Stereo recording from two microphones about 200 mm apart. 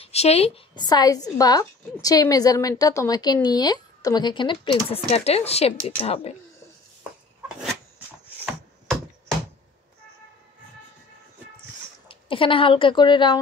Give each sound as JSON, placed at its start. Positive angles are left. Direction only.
{"t": 0.0, "sound": "a woman's voice", "side_deg": 30}
{"t": 12.1, "sound": "a woman's voice", "side_deg": 25}